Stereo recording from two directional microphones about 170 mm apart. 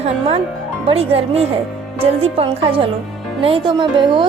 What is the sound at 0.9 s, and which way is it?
A woman's voice, 35° right (ahead or behind).